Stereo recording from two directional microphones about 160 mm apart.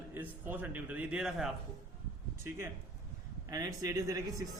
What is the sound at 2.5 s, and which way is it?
Speech, 15° right (ahead or behind).